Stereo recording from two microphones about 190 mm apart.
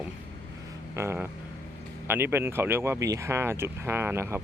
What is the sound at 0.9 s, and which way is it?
Speech, 10° right (ahead or behind).